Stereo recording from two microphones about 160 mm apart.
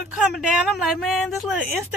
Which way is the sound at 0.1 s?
5° right (ahead or behind).